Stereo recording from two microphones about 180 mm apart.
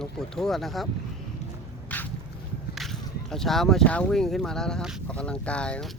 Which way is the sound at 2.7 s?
Centre (ahead or behind).